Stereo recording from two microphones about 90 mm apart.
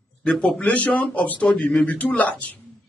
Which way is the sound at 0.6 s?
15° left (ahead or behind).